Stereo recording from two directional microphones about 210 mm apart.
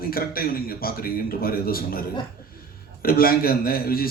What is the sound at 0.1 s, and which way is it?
A man's voice, 45° left (ahead or behind).